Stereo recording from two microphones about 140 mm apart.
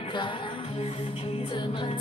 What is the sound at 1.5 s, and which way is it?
Music, 35° left (ahead or behind).